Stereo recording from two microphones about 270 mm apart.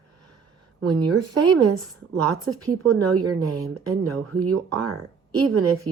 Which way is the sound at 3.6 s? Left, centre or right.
Right.